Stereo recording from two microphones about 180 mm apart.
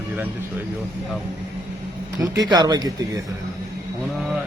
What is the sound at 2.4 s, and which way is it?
Speech, 20° right (ahead or behind).